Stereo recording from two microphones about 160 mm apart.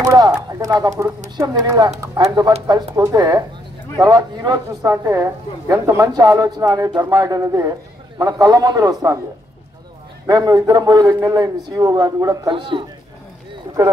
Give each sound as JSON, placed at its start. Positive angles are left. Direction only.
{"t": 0.0, "sound": "a woman's voice", "side_deg": -20}
{"t": 10.2, "sound": "a woman's voice", "side_deg": -25}